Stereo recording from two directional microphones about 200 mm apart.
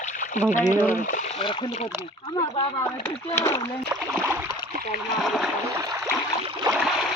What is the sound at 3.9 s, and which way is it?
Speech, 10° right (ahead or behind).